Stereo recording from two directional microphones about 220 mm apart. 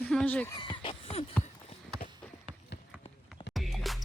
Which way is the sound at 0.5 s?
20° left (ahead or behind).